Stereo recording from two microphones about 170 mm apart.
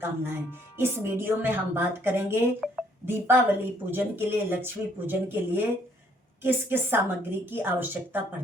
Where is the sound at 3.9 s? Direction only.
15° right (ahead or behind).